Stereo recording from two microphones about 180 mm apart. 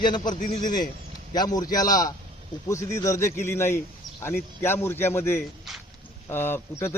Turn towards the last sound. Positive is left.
turn(degrees=15)  # may be behind; listen again after turning